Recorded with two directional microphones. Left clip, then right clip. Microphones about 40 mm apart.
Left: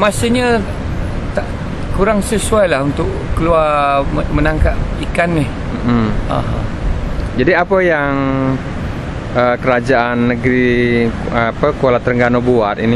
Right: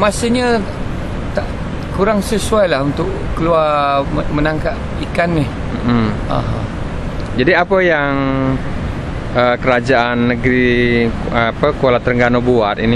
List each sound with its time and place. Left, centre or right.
0.0 s speech: centre
2.0 s speech: centre
5.9 s speech: left
7.3 s speech: left